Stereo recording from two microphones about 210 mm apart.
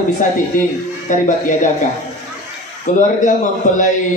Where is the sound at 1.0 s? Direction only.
35° left (ahead or behind).